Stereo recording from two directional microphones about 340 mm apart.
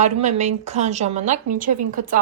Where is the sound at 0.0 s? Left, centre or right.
Right.